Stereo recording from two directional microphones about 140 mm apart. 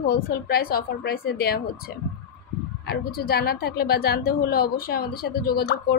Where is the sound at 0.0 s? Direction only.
90° left.